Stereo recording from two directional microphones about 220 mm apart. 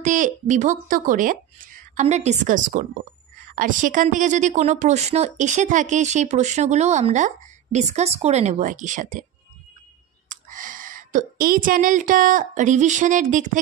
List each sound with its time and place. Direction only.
0.0 s a woman's voice: 35° right (ahead or behind)
10.2 s speech: 35° right (ahead or behind)